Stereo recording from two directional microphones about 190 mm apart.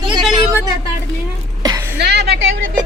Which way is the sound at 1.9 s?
60° right (ahead or behind).